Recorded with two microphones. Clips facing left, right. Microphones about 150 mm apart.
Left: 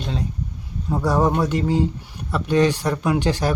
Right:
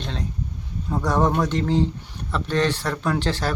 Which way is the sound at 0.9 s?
10° left (ahead or behind).